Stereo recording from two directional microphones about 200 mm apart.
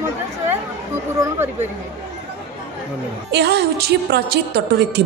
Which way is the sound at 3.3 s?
55° right (ahead or behind).